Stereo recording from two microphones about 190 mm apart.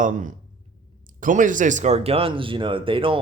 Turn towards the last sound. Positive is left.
turn(degrees=-25)  # may be behind; listen again after turning